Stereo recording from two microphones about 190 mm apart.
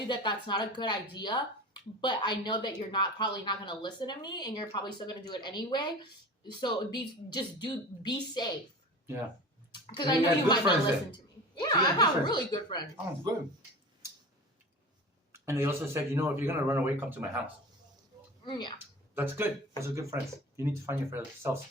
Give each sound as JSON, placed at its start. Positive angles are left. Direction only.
{"t": 0.1, "sound": "a woman's voice", "side_deg": 25}
{"t": 9.7, "sound": "a woman's voice", "side_deg": 25}
{"t": 15.3, "sound": "speech", "side_deg": -15}
{"t": 18.4, "sound": "a woman's voice", "side_deg": 25}
{"t": 19.1, "sound": "speech", "side_deg": -10}